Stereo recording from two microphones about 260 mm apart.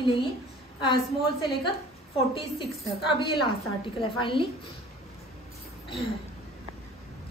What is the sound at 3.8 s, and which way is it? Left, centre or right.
Speech, centre.